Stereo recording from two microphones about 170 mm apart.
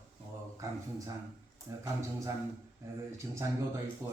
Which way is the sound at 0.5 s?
20° right (ahead or behind).